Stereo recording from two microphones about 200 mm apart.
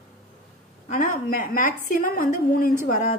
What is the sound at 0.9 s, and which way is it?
A woman's voice, 40° left (ahead or behind).